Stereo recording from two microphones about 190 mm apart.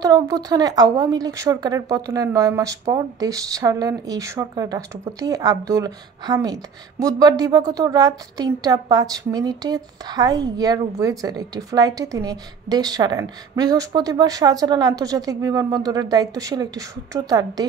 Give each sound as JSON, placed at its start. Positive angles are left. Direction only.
{"t": 0.0, "sound": "speech", "side_deg": -20}